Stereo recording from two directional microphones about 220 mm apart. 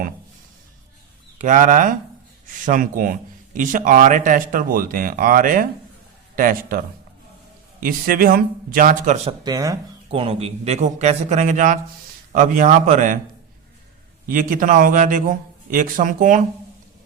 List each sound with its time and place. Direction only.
1.4 s speech: 35° right (ahead or behind)
9.4 s speech: 15° right (ahead or behind)
10.1 s speech: 25° right (ahead or behind)
14.3 s speech: 40° right (ahead or behind)